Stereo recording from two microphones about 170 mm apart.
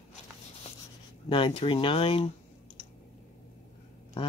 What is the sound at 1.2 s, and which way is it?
Speech, 30° left (ahead or behind).